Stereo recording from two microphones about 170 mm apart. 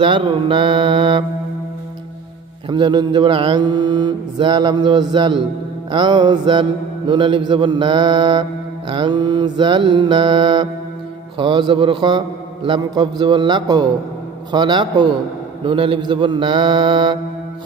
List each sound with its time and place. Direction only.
0.0 s mantra: 30° right (ahead or behind)
2.7 s mantra: 25° right (ahead or behind)